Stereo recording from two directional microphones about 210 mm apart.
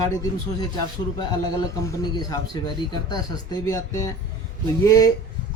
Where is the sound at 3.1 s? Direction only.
15° left (ahead or behind).